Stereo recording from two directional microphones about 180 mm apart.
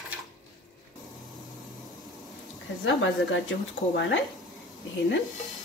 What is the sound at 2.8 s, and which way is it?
A woman's voice, 90° left.